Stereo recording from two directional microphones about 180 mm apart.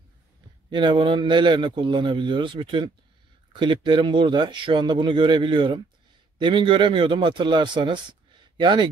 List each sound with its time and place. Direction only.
0.7 s a man's voice: 25° right (ahead or behind)